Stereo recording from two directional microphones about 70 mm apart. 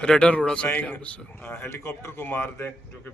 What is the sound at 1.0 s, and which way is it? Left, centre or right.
A man's voice, left.